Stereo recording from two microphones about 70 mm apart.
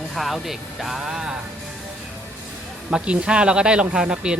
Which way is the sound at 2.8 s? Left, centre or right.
Centre.